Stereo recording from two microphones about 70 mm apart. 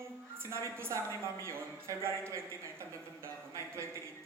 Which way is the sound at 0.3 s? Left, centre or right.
Right.